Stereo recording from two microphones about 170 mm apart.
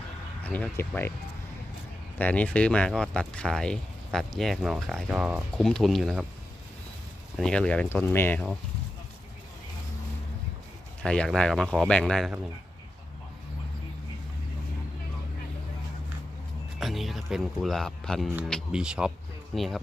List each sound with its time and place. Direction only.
0.4 s speech: 10° left (ahead or behind)
2.1 s speech: 10° left (ahead or behind)
7.3 s speech: 5° left (ahead or behind)
11.0 s speech: 5° left (ahead or behind)
16.8 s speech: centre (ahead or behind)